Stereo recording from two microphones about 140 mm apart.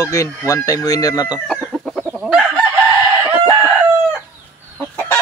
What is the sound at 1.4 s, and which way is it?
Chicken, centre (ahead or behind).